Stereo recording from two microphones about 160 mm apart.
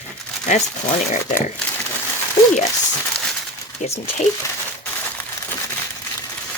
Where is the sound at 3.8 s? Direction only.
40° left (ahead or behind).